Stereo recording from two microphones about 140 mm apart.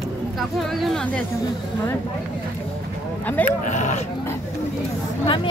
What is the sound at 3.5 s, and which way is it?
Speech, 60° left (ahead or behind).